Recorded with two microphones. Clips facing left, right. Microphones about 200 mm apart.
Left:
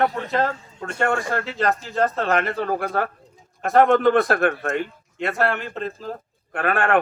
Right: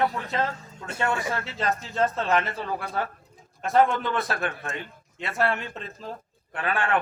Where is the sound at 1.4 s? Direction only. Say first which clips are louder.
Left 5 dB; centre (ahead or behind).